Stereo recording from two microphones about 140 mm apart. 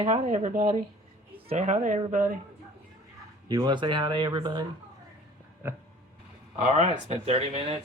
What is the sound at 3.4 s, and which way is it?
Speech, 30° right (ahead or behind).